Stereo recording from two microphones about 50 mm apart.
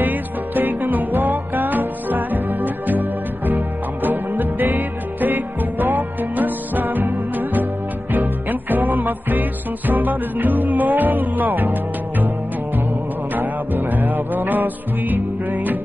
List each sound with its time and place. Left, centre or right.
0.0 s music: right
13.3 s music: right